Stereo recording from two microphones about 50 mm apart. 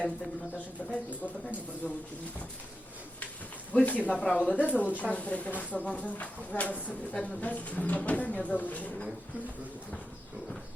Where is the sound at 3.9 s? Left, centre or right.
Left.